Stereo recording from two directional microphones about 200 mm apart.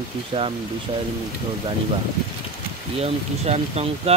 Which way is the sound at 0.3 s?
25° right (ahead or behind).